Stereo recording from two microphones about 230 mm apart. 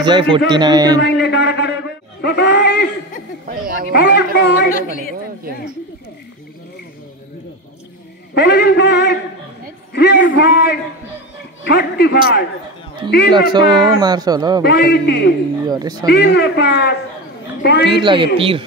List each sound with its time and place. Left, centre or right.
0.0 s speech: centre
1.0 s speech: left
3.4 s speech: right
3.9 s a woman's voice: left
8.4 s speech: left
13.5 s speech: centre
14.6 s speech: left
15.6 s speech: centre
16.1 s speech: left
17.9 s speech: right